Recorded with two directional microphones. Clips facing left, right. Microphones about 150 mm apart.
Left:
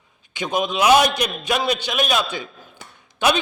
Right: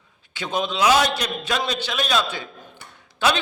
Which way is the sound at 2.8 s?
90° left.